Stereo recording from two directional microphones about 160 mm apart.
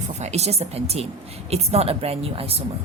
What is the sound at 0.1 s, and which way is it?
A woman's voice, 45° right (ahead or behind).